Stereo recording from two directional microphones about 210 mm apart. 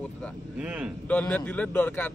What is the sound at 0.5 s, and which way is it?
Speech, 5° right (ahead or behind).